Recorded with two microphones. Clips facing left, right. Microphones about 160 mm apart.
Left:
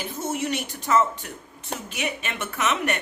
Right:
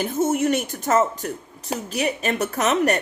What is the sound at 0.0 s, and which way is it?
A woman's voice, 50° right (ahead or behind).